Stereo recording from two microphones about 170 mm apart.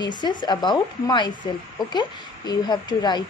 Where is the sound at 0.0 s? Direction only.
25° left (ahead or behind).